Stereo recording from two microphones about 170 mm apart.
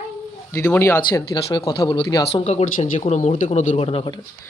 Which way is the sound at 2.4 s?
40° left (ahead or behind).